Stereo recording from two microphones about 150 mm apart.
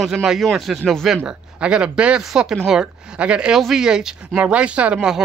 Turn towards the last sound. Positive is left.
turn(degrees=0)  # may be behind; listen again after turning